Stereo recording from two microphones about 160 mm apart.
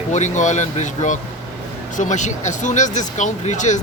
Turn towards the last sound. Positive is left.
turn(degrees=50)  # may be behind; listen again after turning